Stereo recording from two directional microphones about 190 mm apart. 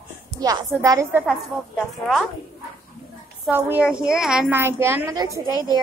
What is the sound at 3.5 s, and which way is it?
A woman's voice, 10° right (ahead or behind).